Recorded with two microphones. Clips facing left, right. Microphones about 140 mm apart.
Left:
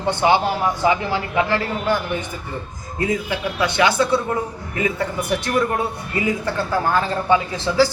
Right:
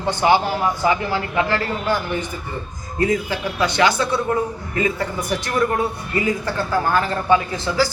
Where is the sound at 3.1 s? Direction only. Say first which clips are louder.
Right 1 dB; 15° left (ahead or behind).